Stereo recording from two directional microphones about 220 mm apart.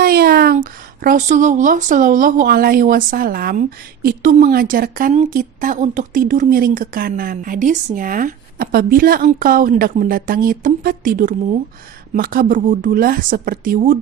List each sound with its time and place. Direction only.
0.0 s speech: 45° right (ahead or behind)